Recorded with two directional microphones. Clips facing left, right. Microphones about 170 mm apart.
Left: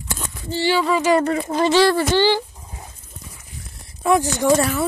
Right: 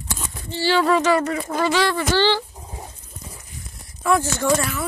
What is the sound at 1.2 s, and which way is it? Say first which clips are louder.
Speech: left 3 dB; 30° left (ahead or behind).